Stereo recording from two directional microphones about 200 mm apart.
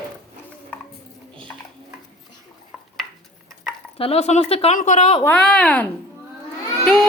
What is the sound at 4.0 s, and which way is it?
Speech, 30° left (ahead or behind).